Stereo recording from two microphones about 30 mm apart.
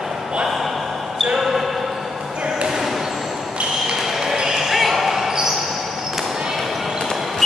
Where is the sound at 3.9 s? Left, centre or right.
Centre.